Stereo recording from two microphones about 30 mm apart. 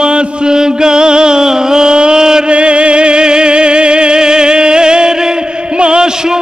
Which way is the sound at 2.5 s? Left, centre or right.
Right.